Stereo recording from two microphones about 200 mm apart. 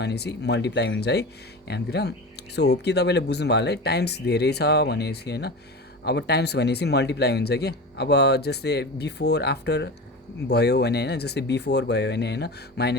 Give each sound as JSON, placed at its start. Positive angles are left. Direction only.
{"t": 0.0, "sound": "speech", "side_deg": 55}